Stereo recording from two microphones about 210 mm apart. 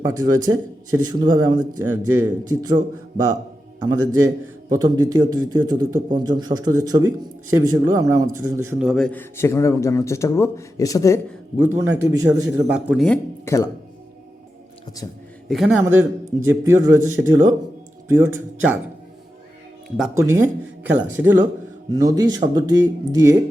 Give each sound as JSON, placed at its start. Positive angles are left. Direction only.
{"t": 0.0, "sound": "speech", "side_deg": -15}
{"t": 3.8, "sound": "a man's voice", "side_deg": -20}
{"t": 11.5, "sound": "speech", "side_deg": -10}
{"t": 13.1, "sound": "speech", "side_deg": 15}
{"t": 15.0, "sound": "a man's voice", "side_deg": 15}
{"t": 15.4, "sound": "speech", "side_deg": 0}
{"t": 20.1, "sound": "speech", "side_deg": -10}